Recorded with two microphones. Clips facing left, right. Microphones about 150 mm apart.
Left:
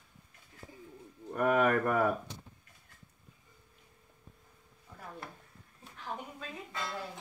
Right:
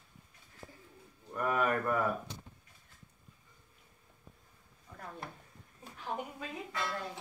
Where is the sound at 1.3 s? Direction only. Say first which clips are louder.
Left 5 dB; 75° left (ahead or behind).